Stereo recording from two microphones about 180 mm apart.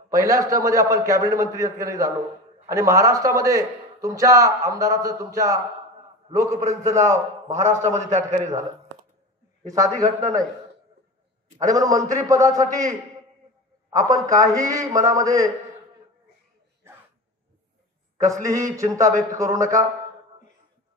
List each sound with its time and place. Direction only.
0.1 s a man's voice: 20° right (ahead or behind)
7.4 s a man's voice: 40° right (ahead or behind)
9.7 s a man's voice: 20° right (ahead or behind)
11.6 s a man's voice: 20° right (ahead or behind)
18.2 s a man's voice: 20° right (ahead or behind)